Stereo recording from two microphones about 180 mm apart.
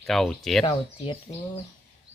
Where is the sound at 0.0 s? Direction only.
Centre (ahead or behind).